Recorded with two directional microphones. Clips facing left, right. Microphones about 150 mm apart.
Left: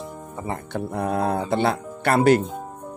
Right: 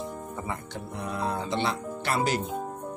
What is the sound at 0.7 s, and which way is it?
Speech, 55° left (ahead or behind).